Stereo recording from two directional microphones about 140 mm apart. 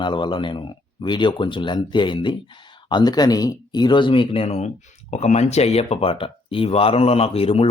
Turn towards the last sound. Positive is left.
turn(degrees=45)  # may be behind; listen again after turning